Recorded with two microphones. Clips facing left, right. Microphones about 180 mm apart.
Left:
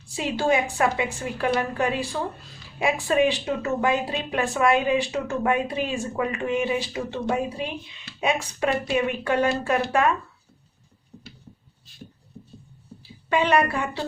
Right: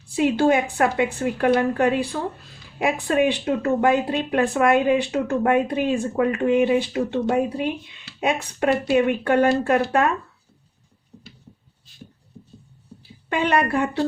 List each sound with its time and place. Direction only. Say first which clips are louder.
0.2 s speech: right 5 dB; 55° right (ahead or behind)
12.4 s writing: left 1 dB; 20° left (ahead or behind)
13.3 s speech: even; 55° right (ahead or behind)